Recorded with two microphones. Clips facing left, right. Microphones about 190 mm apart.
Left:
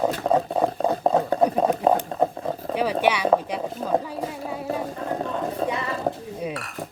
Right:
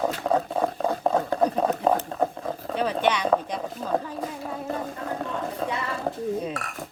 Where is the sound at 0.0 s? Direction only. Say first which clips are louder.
Left 3 dB; 15° left (ahead or behind).